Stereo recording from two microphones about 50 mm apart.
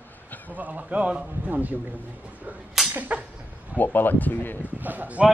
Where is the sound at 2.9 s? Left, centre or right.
Right.